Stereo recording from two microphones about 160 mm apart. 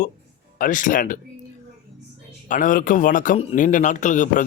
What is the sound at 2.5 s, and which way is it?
A man's voice, 55° left (ahead or behind).